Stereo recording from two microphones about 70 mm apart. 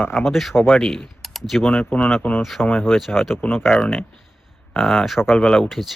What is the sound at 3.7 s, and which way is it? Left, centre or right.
Speech, centre.